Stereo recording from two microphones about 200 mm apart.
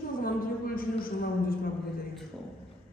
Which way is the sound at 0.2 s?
45° left (ahead or behind).